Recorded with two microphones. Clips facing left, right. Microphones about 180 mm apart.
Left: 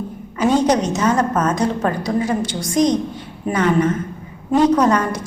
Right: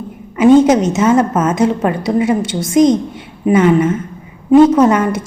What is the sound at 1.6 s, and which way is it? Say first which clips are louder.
Speech: right 5 dB; 25° right (ahead or behind).